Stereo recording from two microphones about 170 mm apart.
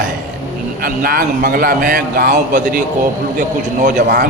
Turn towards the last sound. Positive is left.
turn(degrees=-60)  # may be behind; listen again after turning